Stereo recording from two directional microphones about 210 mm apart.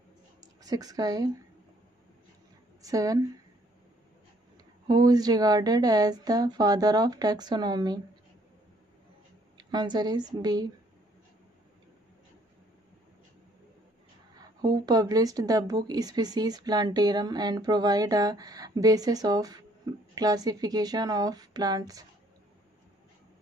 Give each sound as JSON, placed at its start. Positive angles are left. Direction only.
{"t": 0.6, "sound": "a woman's voice", "side_deg": -15}
{"t": 2.8, "sound": "a woman's voice", "side_deg": -15}
{"t": 4.8, "sound": "speech", "side_deg": -20}
{"t": 9.6, "sound": "speech", "side_deg": -20}
{"t": 14.3, "sound": "a woman's voice", "side_deg": -20}